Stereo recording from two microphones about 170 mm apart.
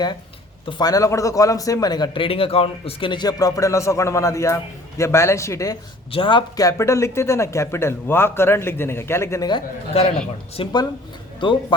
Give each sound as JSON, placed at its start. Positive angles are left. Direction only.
{"t": 0.7, "sound": "a man's voice", "side_deg": 25}
{"t": 6.1, "sound": "speech", "side_deg": 30}
{"t": 10.6, "sound": "a man's voice", "side_deg": 25}